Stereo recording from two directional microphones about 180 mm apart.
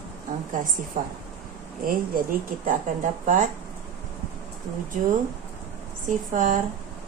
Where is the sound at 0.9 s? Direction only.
45° right (ahead or behind).